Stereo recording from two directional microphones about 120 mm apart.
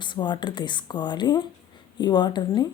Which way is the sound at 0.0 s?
40° left (ahead or behind).